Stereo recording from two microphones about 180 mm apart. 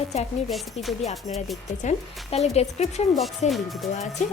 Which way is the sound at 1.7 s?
40° left (ahead or behind).